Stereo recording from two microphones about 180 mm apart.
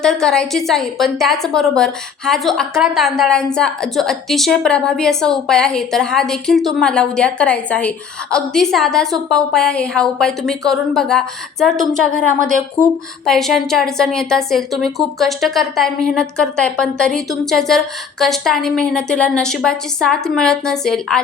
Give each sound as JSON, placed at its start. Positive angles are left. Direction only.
{"t": 0.0, "sound": "a woman's voice", "side_deg": 0}